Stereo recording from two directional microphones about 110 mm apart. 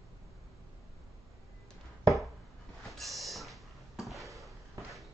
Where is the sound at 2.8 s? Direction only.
Centre (ahead or behind).